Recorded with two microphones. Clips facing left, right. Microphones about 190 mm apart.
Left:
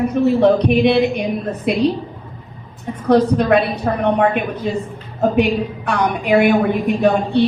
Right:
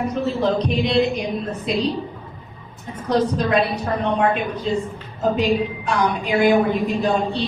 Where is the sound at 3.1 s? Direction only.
60° left (ahead or behind).